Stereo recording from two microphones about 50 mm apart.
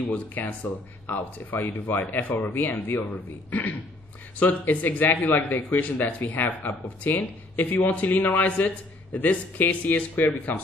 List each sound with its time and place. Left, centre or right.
0.0 s speech: left